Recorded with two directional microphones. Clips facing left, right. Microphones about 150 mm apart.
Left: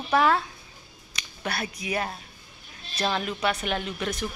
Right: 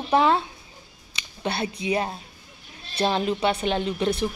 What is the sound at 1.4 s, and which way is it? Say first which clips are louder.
A woman's voice: right 5 dB; 25° right (ahead or behind).